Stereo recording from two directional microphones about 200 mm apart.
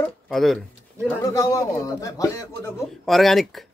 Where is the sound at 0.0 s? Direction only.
Centre (ahead or behind).